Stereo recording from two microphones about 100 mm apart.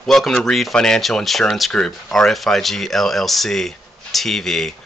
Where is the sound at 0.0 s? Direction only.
Centre (ahead or behind).